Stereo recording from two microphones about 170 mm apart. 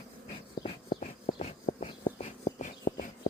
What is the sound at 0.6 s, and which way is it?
Dog, 35° left (ahead or behind).